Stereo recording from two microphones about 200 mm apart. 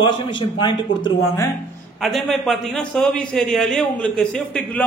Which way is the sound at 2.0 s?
Centre (ahead or behind).